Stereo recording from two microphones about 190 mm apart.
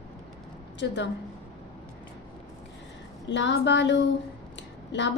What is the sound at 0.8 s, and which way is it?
Speech, 70° left (ahead or behind).